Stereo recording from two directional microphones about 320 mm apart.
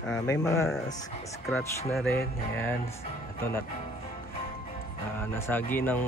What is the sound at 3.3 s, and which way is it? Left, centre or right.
Speech, centre.